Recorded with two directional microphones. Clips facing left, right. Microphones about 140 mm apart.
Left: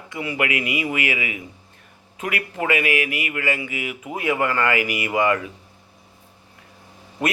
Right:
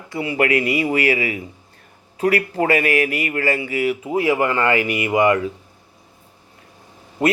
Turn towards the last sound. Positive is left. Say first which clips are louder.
# right 6 dB
turn(degrees=-25)  # may be behind; listen again after turning